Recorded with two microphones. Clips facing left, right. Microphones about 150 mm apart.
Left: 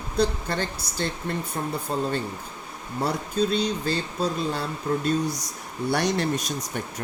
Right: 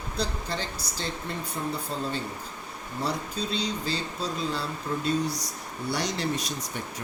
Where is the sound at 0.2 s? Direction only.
55° left (ahead or behind).